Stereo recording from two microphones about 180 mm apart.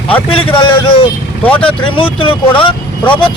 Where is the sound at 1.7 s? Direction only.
30° left (ahead or behind).